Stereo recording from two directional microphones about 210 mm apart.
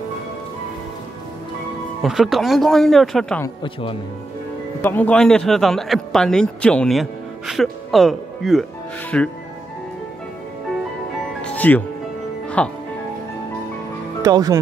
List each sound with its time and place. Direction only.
2.0 s speech: centre (ahead or behind)
3.4 s a man's voice: 25° left (ahead or behind)
4.8 s a man's voice: 10° left (ahead or behind)
11.4 s music: 10° left (ahead or behind)
14.2 s speech: 15° right (ahead or behind)